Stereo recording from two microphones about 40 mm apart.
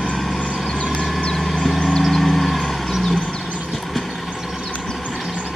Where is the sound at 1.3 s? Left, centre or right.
Centre.